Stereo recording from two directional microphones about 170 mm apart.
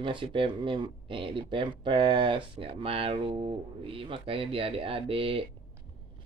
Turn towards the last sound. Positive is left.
turn(degrees=-30)  # may be behind; listen again after turning